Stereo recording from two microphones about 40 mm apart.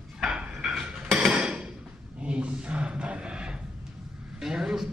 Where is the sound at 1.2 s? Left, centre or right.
Right.